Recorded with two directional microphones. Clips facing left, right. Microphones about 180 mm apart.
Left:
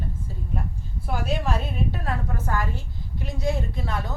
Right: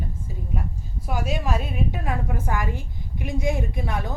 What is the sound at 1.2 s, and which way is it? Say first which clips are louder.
A woman's voice: even; 10° right (ahead or behind).